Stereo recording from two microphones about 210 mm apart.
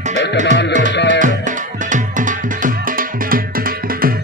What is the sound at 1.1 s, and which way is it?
Music, 35° right (ahead or behind).